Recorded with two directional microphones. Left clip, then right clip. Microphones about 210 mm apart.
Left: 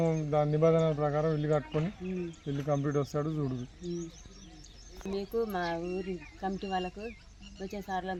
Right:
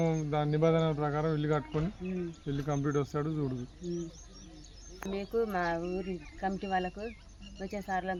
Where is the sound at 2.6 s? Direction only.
40° left (ahead or behind).